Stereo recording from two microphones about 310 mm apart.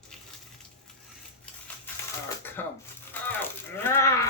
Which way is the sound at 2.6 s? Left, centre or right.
Centre.